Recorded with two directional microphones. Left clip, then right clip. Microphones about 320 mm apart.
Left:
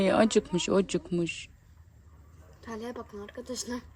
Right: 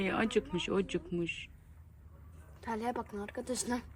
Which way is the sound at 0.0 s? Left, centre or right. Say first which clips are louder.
Left 8 dB; centre.